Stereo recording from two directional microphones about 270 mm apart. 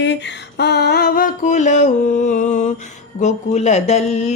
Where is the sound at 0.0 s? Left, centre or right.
Left.